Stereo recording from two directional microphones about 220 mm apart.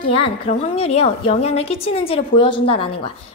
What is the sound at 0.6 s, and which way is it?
A woman's voice, 25° left (ahead or behind).